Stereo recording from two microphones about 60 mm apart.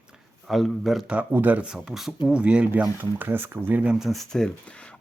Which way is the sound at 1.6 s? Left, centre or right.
Centre.